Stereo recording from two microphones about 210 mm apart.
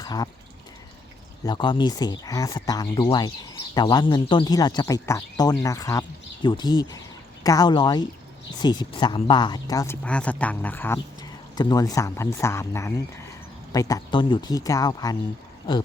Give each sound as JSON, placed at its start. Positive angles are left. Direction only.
{"t": 0.0, "sound": "speech", "side_deg": 20}
{"t": 1.5, "sound": "speech", "side_deg": 20}